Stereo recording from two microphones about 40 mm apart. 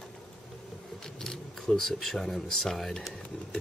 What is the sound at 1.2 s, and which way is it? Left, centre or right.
Speech, centre.